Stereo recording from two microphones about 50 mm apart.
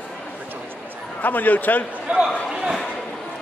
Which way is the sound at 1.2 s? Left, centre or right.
Left.